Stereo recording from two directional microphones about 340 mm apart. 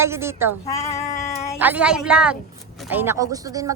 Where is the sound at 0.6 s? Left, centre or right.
Centre.